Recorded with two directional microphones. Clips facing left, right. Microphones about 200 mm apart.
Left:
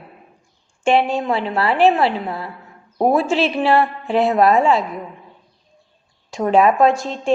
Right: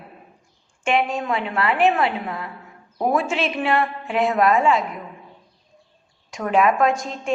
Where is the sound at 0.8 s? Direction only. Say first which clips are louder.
Left 5 dB; 30° left (ahead or behind).